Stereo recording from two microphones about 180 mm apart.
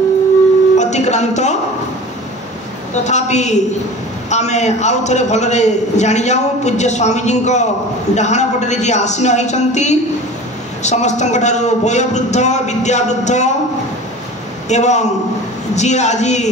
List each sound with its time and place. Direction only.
0.7 s a sound: 40° left (ahead or behind)
2.9 s a man's voice: 40° left (ahead or behind)
14.7 s a man's voice: 40° left (ahead or behind)